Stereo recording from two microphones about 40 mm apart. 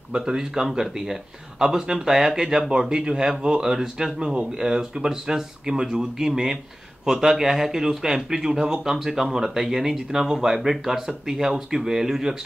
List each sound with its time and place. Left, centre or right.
0.2 s speech: centre